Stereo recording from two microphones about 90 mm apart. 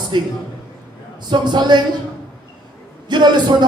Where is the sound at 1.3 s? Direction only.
55° right (ahead or behind).